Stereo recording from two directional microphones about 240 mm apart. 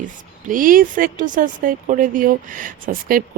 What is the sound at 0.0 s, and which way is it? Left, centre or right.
Speech, right.